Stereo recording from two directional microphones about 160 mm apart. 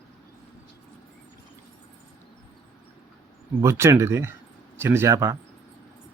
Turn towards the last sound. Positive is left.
turn(degrees=-20)  # may be behind; listen again after turning